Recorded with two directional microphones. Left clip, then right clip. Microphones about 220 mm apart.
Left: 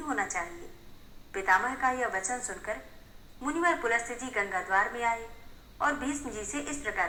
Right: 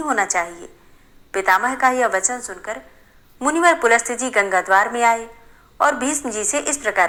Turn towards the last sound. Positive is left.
turn(degrees=-40)  # may be behind; listen again after turning